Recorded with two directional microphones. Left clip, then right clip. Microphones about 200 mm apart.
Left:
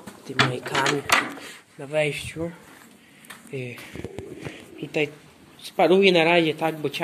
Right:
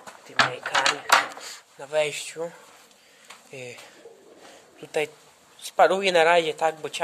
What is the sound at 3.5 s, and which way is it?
Speech, 20° right (ahead or behind).